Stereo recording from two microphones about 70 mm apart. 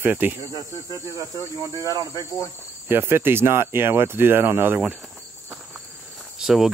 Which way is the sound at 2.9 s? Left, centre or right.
Right.